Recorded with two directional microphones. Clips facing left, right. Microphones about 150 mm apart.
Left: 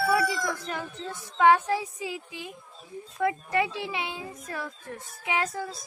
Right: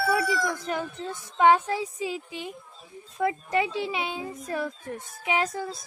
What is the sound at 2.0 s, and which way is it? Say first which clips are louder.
A woman's voice: right 4 dB; 20° right (ahead or behind).